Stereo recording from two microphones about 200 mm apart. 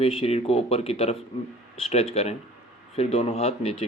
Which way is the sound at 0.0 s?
30° left (ahead or behind).